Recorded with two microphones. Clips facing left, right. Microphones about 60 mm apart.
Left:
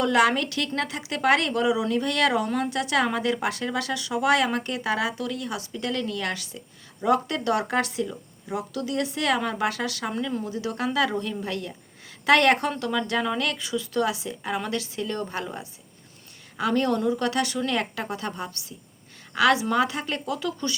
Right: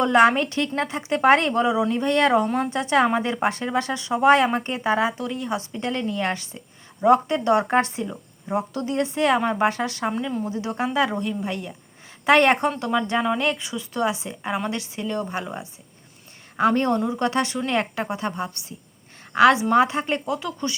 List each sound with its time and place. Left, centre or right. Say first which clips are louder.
0.0 s a woman's voice: right 4 dB; right